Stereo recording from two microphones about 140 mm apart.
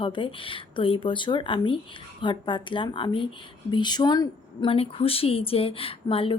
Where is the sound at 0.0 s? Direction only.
35° left (ahead or behind).